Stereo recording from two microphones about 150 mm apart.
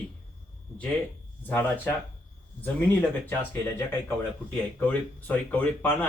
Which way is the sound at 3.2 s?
15° left (ahead or behind).